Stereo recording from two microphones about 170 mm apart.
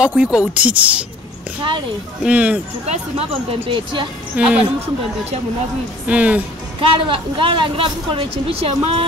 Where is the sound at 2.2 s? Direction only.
10° right (ahead or behind).